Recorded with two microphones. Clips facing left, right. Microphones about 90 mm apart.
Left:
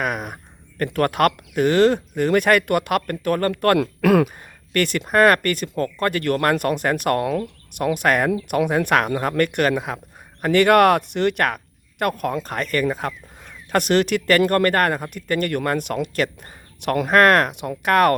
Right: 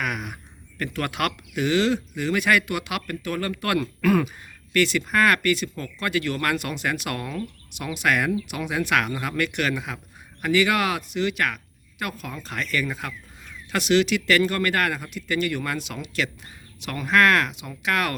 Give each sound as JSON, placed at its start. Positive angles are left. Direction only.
{"t": 0.0, "sound": "a sound", "side_deg": 35}
{"t": 0.8, "sound": "speech", "side_deg": 45}
{"t": 3.8, "sound": "speech", "side_deg": 80}
{"t": 4.7, "sound": "speech", "side_deg": 50}
{"t": 10.5, "sound": "speech", "side_deg": 55}